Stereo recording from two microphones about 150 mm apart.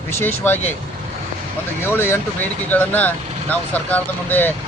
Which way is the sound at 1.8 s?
15° left (ahead or behind).